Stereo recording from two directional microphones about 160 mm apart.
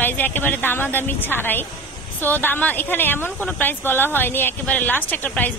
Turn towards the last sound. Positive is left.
turn(degrees=10)  # may be behind; listen again after turning